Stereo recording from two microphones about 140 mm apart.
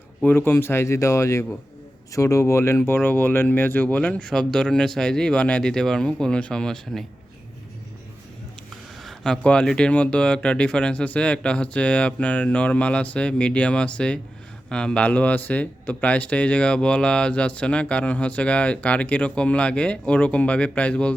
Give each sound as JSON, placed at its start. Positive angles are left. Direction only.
{"t": 0.2, "sound": "speech", "side_deg": 15}
{"t": 9.0, "sound": "speech", "side_deg": 5}